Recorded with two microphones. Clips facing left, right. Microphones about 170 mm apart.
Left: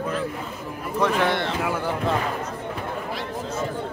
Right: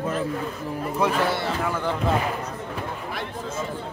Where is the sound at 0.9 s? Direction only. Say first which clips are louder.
Left 2 dB; 5° right (ahead or behind).